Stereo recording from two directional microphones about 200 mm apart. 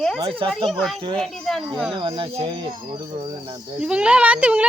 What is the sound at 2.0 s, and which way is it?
Speech, 25° right (ahead or behind).